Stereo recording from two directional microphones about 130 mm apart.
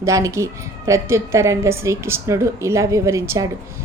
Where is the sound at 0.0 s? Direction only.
25° right (ahead or behind).